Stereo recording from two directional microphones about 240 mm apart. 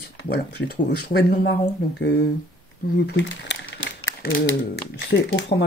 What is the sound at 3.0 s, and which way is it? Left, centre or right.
Speech, left.